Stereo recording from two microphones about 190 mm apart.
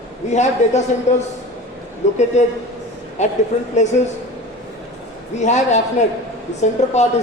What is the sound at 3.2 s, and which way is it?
Speech, 40° left (ahead or behind).